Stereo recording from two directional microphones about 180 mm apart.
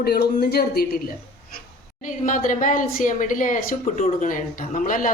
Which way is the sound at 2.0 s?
45° left (ahead or behind).